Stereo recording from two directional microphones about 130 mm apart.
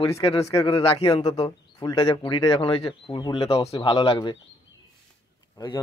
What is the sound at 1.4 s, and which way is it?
Speech, 30° left (ahead or behind).